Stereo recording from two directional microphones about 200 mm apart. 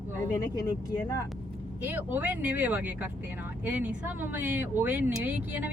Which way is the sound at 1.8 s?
10° right (ahead or behind).